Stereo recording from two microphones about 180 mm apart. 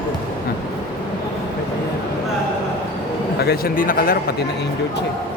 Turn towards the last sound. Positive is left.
turn(degrees=55)  # may be behind; listen again after turning